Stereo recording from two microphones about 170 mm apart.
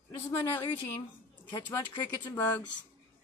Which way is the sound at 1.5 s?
25° left (ahead or behind).